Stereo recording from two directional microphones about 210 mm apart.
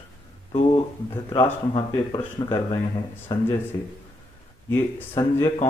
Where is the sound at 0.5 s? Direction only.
25° left (ahead or behind).